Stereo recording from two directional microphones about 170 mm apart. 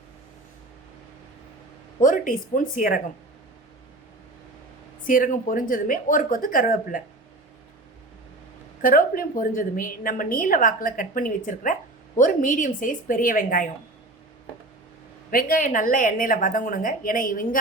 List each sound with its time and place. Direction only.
2.0 s a woman's voice: 50° left (ahead or behind)
5.0 s a woman's voice: 55° left (ahead or behind)
8.8 s a woman's voice: 55° left (ahead or behind)
15.3 s a woman's voice: 55° left (ahead or behind)